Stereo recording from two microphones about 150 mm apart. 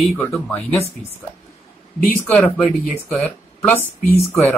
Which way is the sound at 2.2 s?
5° left (ahead or behind).